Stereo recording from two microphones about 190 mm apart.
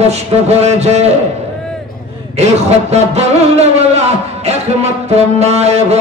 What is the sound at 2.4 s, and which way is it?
A man's voice, 35° right (ahead or behind).